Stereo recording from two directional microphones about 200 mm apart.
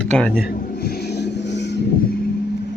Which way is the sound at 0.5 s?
50° left (ahead or behind).